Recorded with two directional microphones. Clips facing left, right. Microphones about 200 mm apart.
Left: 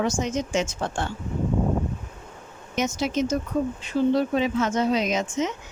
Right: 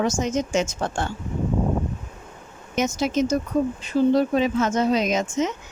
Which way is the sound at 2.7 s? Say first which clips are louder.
Right 3 dB; 45° right (ahead or behind).